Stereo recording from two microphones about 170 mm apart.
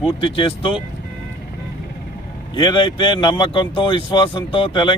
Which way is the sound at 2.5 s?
25° left (ahead or behind).